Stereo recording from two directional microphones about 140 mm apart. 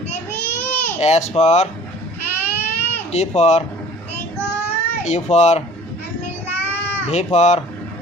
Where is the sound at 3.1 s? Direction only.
50° left (ahead or behind).